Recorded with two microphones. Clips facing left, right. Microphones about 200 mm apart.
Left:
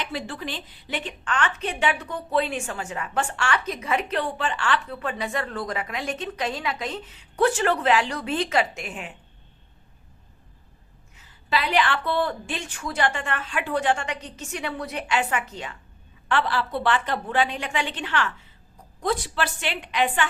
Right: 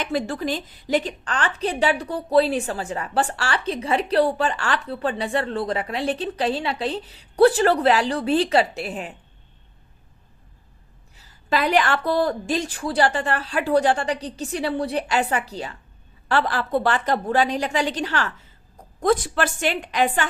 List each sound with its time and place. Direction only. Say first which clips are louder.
0.0 s a woman's voice: right 7 dB; 45° right (ahead or behind)
11.2 s a woman's voice: right 4 dB; 45° right (ahead or behind)